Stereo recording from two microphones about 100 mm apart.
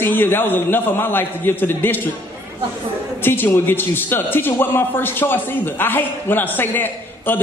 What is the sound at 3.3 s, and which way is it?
Speech, 20° left (ahead or behind).